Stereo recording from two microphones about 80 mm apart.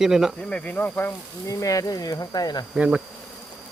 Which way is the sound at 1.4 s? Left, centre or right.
Left.